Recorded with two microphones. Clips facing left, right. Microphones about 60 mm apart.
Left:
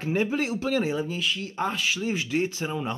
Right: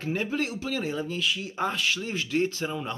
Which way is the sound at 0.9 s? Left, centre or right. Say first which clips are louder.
Left 1 dB; centre.